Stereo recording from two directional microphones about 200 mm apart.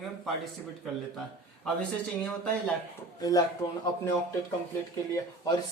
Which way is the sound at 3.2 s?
15° left (ahead or behind).